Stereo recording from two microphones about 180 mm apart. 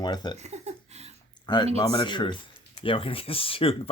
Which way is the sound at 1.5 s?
25° left (ahead or behind).